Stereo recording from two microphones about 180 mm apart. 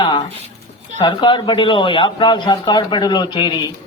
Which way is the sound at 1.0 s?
25° left (ahead or behind).